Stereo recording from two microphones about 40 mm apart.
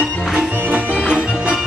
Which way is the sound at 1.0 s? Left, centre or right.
Right.